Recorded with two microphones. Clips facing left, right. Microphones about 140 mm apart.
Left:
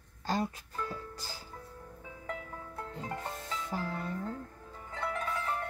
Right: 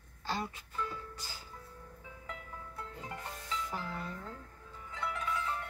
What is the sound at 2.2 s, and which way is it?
Music, 50° left (ahead or behind).